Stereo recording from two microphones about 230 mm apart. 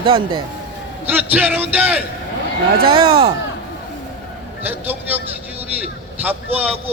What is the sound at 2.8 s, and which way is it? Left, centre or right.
Speech, right.